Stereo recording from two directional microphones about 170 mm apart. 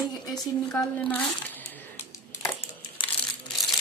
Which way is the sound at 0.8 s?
10° left (ahead or behind).